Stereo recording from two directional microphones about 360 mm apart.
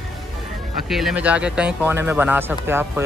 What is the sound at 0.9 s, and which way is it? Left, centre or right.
Speech, centre.